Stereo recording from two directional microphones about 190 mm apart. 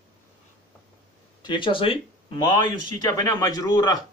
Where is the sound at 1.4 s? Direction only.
25° left (ahead or behind).